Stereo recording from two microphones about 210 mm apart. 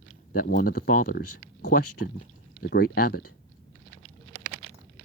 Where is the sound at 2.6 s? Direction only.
45° left (ahead or behind).